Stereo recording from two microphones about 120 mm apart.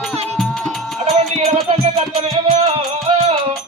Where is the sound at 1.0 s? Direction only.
65° right (ahead or behind).